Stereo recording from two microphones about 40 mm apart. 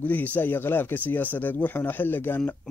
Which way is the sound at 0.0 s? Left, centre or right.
Left.